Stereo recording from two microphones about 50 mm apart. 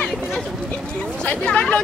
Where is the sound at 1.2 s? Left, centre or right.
Left.